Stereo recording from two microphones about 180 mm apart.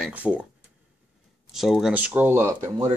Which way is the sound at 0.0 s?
5° right (ahead or behind).